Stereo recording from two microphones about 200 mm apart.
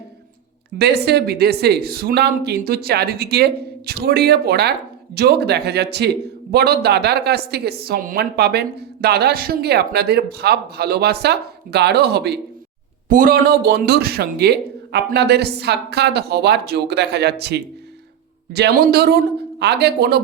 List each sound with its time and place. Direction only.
0.8 s a woman's voice: 55° right (ahead or behind)
13.1 s speech: 45° right (ahead or behind)